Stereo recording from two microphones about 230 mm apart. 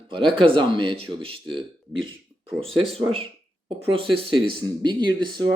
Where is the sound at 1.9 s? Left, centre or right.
Right.